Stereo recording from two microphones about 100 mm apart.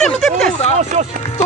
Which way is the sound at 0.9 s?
90° right.